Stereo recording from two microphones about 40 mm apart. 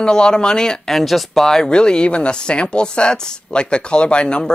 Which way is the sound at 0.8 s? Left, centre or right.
Centre.